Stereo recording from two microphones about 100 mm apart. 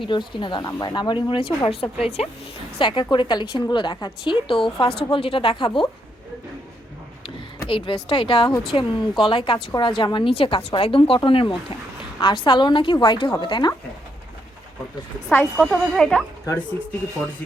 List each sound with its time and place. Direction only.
0.0 s a woman's voice: 55° left (ahead or behind)
1.6 s a woman's voice: 65° left (ahead or behind)
2.7 s a woman's voice: 55° left (ahead or behind)
4.3 s speech: 60° left (ahead or behind)
7.7 s a woman's voice: 60° left (ahead or behind)
15.3 s a woman's voice: 20° left (ahead or behind)
15.7 s speech: 5° left (ahead or behind)